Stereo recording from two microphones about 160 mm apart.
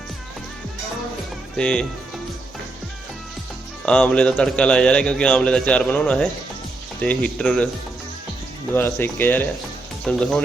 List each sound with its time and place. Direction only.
1.5 s a man's voice: 5° left (ahead or behind)
3.8 s a man's voice: 5° left (ahead or behind)
8.7 s a man's voice: 15° left (ahead or behind)